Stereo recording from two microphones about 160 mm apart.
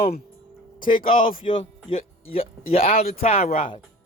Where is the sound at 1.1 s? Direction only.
60° left (ahead or behind).